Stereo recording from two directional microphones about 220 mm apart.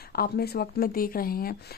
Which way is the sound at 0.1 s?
45° left (ahead or behind).